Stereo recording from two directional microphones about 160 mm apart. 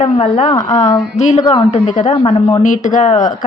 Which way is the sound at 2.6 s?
50° left (ahead or behind).